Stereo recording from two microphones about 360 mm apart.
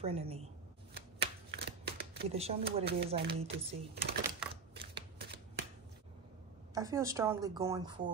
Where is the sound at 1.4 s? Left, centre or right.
Right.